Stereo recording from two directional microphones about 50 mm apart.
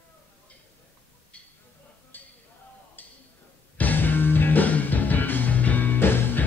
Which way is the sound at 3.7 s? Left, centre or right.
Left.